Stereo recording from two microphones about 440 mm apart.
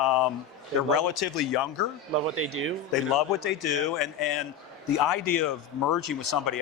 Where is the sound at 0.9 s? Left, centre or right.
Left.